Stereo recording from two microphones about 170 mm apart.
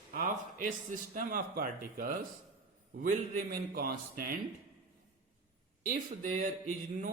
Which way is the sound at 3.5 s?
60° right (ahead or behind).